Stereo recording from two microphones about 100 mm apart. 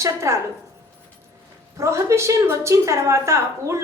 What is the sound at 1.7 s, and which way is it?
A woman's voice, 30° right (ahead or behind).